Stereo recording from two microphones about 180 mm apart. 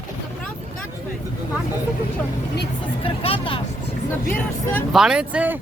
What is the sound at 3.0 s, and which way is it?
Vehicle, 30° left (ahead or behind).